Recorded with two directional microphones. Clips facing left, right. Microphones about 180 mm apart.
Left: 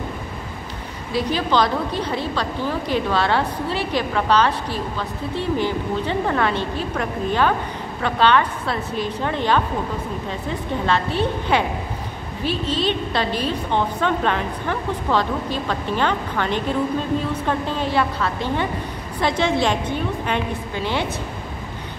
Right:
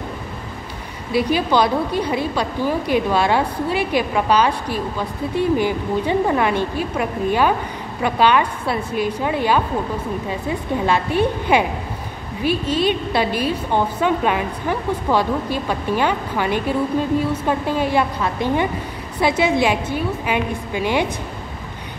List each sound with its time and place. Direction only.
1.1 s a woman's voice: 10° right (ahead or behind)